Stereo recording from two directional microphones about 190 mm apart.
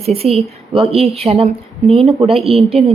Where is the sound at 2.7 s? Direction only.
30° right (ahead or behind).